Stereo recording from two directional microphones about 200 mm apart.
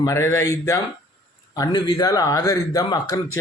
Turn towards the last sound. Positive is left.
turn(degrees=20)  # may be behind; listen again after turning